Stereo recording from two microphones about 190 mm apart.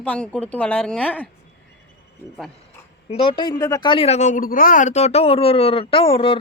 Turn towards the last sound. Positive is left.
turn(degrees=30)  # may be behind; listen again after turning